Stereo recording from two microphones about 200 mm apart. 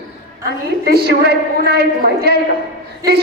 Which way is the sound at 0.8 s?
50° right (ahead or behind).